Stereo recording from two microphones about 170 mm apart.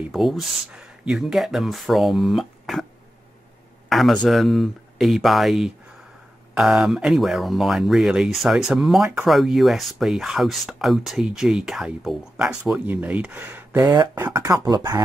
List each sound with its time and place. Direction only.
0.0 s speech: centre (ahead or behind)
3.9 s speech: 5° left (ahead or behind); by 15.0 s 20° right (ahead or behind)